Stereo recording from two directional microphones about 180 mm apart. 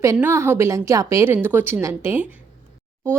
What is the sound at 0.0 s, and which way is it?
A woman's voice, 15° right (ahead or behind).